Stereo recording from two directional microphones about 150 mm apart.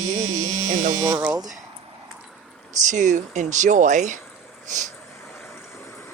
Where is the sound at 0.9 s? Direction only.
25° right (ahead or behind).